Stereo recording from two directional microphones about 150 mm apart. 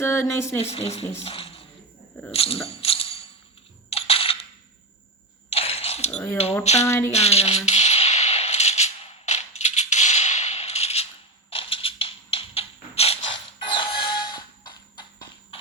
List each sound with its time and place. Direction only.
0.0 s speech: 15° left (ahead or behind)
0.6 s speech: 45° left (ahead or behind)
2.3 s tambourine: 40° left (ahead or behind)
3.8 s coin: 40° left (ahead or behind)
5.5 s a sound: 40° left (ahead or behind)
6.8 s speech: 15° left (ahead or behind)
7.1 s a sound: 45° left (ahead or behind)
11.5 s music: 35° left (ahead or behind)